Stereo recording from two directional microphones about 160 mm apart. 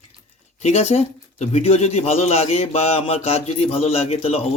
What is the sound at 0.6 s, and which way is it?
Speech, 45° left (ahead or behind).